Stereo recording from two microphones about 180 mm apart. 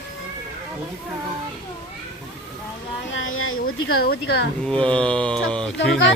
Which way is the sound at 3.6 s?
60° left (ahead or behind).